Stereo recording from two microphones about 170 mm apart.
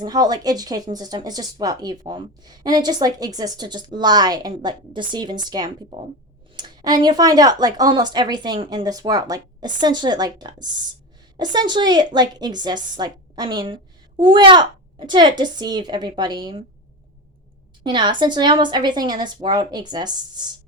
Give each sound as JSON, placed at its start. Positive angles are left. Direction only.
{"t": 0.0, "sound": "speech", "side_deg": -25}
{"t": 17.8, "sound": "speech", "side_deg": -25}